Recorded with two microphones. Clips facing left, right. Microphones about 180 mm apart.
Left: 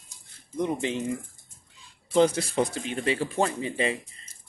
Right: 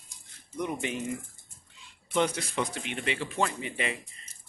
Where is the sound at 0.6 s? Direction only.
30° left (ahead or behind).